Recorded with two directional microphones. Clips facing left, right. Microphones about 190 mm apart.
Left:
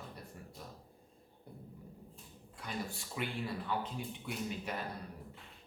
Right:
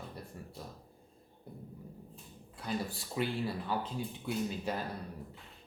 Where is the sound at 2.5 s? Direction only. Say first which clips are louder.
Right 5 dB; 35° right (ahead or behind).